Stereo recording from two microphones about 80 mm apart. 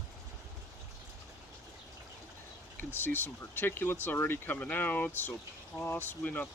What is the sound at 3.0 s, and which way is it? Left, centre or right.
Speech, left.